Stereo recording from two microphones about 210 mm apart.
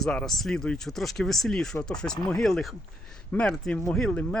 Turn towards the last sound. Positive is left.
turn(degrees=5)  # may be behind; listen again after turning